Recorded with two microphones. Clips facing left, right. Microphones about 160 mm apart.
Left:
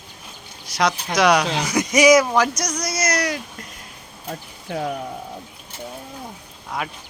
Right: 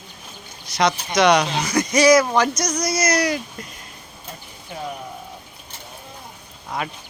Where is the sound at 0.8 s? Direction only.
5° left (ahead or behind).